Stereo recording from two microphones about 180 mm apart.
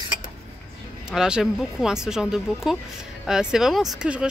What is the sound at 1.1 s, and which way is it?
Speech, 5° right (ahead or behind).